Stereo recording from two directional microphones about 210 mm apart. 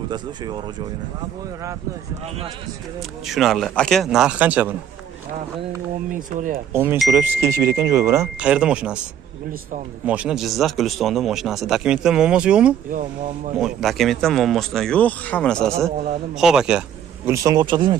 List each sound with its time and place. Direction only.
0.1 s speech: 20° right (ahead or behind)
3.3 s a man's voice: centre (ahead or behind)
6.0 s speech: 40° right (ahead or behind)
6.7 s speech: 10° right (ahead or behind)
10.0 s a man's voice: 5° right (ahead or behind)
17.3 s speech: 15° right (ahead or behind)